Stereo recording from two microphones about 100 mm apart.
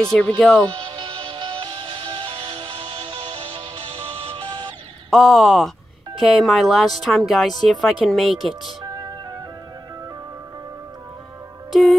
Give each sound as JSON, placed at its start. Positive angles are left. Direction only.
{"t": 0.0, "sound": "speech", "side_deg": 5}
{"t": 5.1, "sound": "speech", "side_deg": 0}
{"t": 8.8, "sound": "music", "side_deg": -40}
{"t": 11.7, "sound": "music", "side_deg": 0}